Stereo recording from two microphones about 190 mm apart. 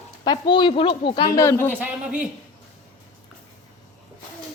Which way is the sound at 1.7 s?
10° right (ahead or behind).